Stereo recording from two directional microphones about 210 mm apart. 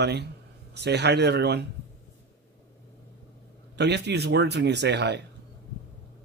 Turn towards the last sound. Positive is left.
turn(degrees=-55)  # may be behind; listen again after turning